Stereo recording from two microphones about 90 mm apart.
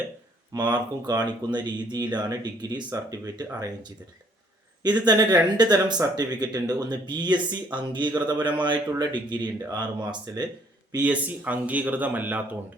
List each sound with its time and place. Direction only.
0.5 s speech: 55° right (ahead or behind)
11.0 s speech: 15° right (ahead or behind)